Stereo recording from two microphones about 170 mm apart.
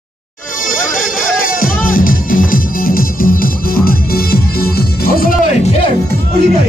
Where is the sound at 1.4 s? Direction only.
55° left (ahead or behind).